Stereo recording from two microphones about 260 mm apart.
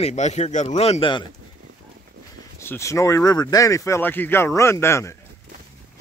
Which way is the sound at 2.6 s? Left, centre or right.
Centre.